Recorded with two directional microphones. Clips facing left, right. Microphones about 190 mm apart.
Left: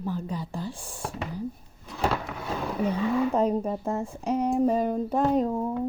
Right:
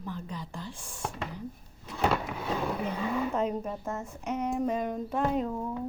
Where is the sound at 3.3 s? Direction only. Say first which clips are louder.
Left 6 dB; 35° left (ahead or behind).